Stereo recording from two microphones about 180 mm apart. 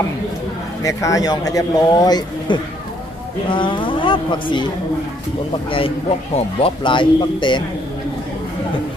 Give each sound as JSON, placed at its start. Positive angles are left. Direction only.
{"t": 0.8, "sound": "speech", "side_deg": 20}
{"t": 5.7, "sound": "speech", "side_deg": 30}